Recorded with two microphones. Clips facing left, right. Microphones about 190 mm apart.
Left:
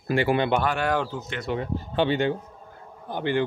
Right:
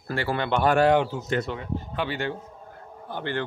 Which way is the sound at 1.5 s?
30° left (ahead or behind).